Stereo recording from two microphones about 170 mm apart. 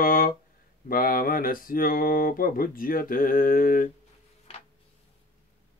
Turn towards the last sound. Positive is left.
turn(degrees=55)  # may be behind; listen again after turning